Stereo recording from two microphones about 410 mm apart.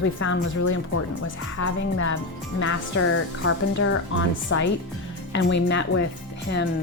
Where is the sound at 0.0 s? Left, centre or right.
Left.